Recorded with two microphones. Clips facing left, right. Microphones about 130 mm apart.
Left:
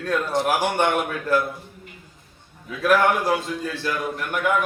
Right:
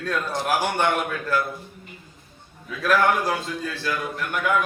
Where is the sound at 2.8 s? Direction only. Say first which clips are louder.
Left 2 dB; 15° left (ahead or behind).